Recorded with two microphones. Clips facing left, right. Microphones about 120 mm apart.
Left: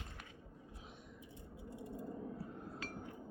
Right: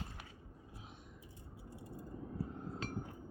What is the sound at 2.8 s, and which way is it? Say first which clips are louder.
Chink: right 5 dB; 25° right (ahead or behind).